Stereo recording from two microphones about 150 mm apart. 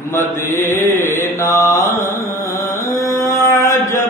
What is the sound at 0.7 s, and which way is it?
Mantra, 55° left (ahead or behind).